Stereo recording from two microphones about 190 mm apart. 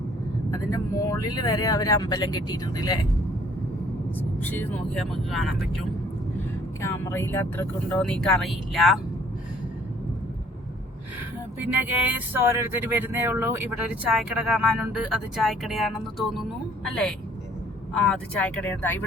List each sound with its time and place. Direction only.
0.7 s speech: 20° left (ahead or behind)
4.2 s speech: 10° left (ahead or behind)
6.8 s speech: 15° left (ahead or behind)
12.0 s speech: 10° right (ahead or behind); by 19.0 s 10° left (ahead or behind)